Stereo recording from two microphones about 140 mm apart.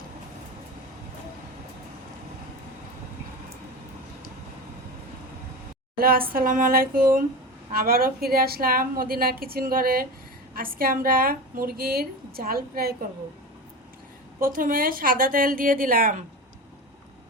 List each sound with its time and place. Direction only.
6.0 s a woman's voice: 90° right
14.4 s a woman's voice: 80° right